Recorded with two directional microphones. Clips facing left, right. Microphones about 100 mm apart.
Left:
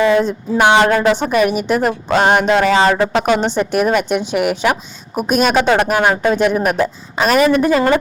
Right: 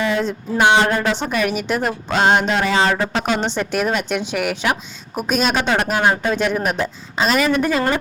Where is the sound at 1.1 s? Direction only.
50° left (ahead or behind).